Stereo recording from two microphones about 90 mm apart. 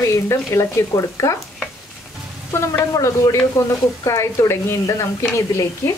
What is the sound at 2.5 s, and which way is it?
Speech, 30° left (ahead or behind).